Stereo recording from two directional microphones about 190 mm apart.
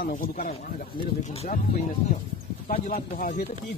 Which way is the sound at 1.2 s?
35° left (ahead or behind).